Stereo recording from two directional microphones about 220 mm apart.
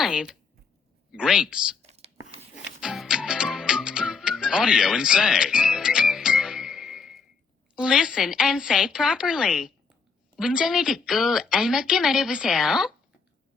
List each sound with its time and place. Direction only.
0.0 s a woman's voice: 5° right (ahead or behind)
1.8 s whispering: 30° right (ahead or behind)
2.6 s music: centre (ahead or behind)
7.8 s a woman's voice: 5° right (ahead or behind)